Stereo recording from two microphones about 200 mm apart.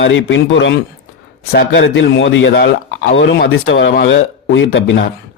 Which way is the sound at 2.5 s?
55° left (ahead or behind).